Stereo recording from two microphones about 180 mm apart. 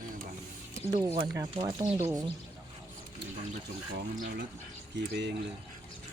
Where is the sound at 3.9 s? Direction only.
75° right (ahead or behind).